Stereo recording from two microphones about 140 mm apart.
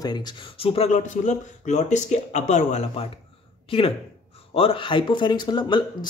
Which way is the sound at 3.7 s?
40° left (ahead or behind).